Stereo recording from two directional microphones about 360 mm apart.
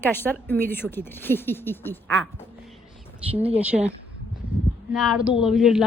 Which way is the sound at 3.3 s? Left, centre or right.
Centre.